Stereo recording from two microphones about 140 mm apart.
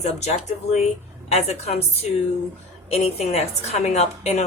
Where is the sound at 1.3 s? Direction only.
50° left (ahead or behind).